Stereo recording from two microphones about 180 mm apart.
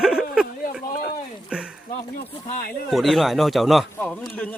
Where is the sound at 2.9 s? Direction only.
Centre (ahead or behind).